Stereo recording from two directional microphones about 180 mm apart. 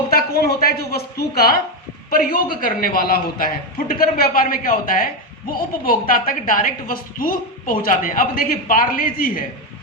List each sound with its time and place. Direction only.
0.1 s a woman's voice: 60° left (ahead or behind)